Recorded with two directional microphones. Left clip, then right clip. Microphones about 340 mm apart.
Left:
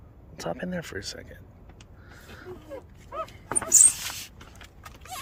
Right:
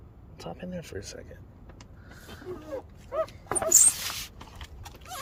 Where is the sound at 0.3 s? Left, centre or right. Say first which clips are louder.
Left 7 dB; centre.